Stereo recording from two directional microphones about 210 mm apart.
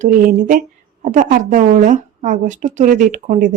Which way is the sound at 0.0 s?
45° right (ahead or behind).